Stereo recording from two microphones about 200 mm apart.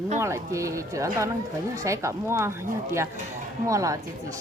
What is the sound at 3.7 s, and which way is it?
Speech, 15° right (ahead or behind).